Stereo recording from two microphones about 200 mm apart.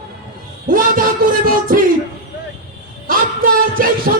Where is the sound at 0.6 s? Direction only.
45° right (ahead or behind).